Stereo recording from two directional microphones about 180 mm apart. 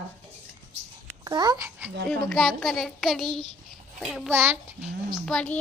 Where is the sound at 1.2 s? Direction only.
25° right (ahead or behind).